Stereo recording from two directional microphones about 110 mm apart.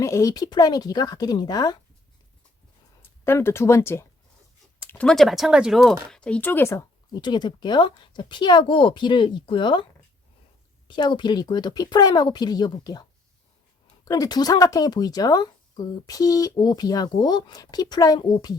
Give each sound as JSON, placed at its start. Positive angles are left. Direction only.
{"t": 0.0, "sound": "speech", "side_deg": 25}
{"t": 3.0, "sound": "speech", "side_deg": 20}
{"t": 4.9, "sound": "speech", "side_deg": 5}
{"t": 7.1, "sound": "speech", "side_deg": 40}
{"t": 10.8, "sound": "speech", "side_deg": 45}